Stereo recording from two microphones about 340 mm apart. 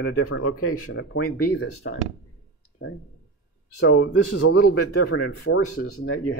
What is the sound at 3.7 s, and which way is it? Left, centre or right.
Speech, left.